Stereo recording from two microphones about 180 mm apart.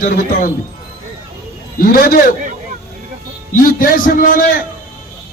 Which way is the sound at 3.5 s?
50° left (ahead or behind).